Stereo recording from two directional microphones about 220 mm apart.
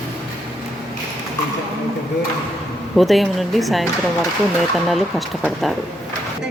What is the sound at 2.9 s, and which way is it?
Speech, centre (ahead or behind).